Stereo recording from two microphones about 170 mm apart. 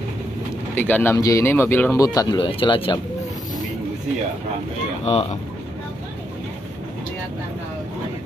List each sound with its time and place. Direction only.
0.7 s speech: 10° left (ahead or behind)
2.1 s speech: 25° left (ahead or behind)
5.0 s speech: 35° left (ahead or behind)